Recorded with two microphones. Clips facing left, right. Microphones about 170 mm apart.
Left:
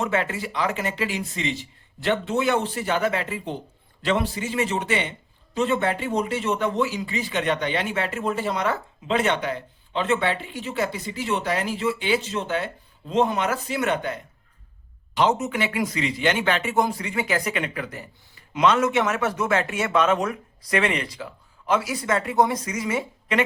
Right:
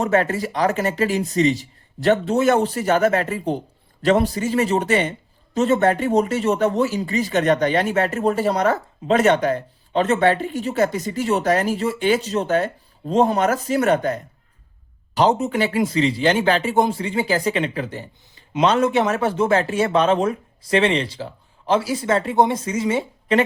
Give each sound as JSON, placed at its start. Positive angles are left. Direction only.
{"t": 0.0, "sound": "speech", "side_deg": -40}